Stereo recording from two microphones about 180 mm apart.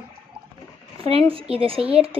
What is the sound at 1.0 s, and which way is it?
Speech, 30° right (ahead or behind).